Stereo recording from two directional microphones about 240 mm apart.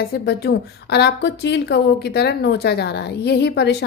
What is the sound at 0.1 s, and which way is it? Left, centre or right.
A woman's voice, left.